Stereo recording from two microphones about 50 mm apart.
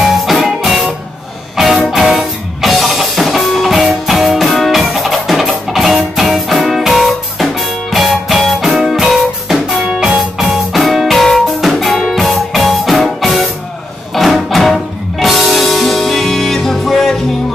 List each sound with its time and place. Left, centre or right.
0.0 s music: centre
9.8 s music: centre